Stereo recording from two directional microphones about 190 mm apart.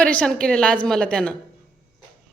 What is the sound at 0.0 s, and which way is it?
A woman's voice, 5° left (ahead or behind).